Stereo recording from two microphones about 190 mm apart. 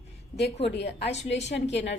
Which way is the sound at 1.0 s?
35° left (ahead or behind).